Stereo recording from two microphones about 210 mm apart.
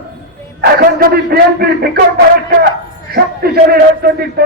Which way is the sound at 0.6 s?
45° right (ahead or behind).